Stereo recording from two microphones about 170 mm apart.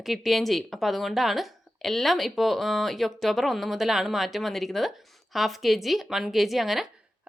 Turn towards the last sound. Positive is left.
turn(degrees=0)  # may be behind; listen again after turning